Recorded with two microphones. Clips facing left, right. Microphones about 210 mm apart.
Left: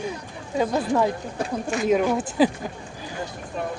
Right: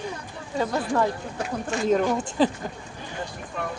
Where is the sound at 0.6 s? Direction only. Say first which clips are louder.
Left 2 dB; 15° left (ahead or behind).